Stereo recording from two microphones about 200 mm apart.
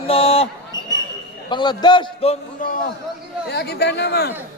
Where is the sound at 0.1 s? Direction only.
30° left (ahead or behind).